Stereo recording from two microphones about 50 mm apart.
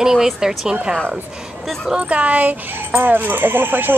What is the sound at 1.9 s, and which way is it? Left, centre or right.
Speech, right.